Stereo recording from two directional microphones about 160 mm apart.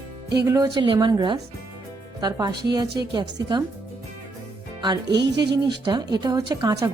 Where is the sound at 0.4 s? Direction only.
20° right (ahead or behind).